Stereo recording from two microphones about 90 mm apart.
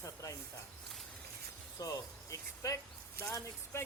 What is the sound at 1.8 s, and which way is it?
Speech, 45° left (ahead or behind).